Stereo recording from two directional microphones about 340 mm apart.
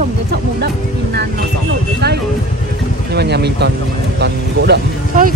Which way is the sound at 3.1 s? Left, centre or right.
Right.